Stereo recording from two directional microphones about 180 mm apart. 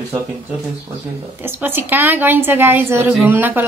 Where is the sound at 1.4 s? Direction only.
10° right (ahead or behind).